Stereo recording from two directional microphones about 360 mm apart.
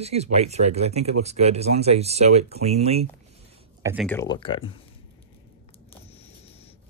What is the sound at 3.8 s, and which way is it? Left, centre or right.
Speech, centre.